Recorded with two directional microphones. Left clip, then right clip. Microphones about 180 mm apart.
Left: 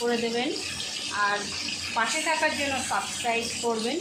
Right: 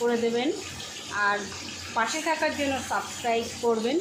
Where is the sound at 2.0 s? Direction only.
35° right (ahead or behind).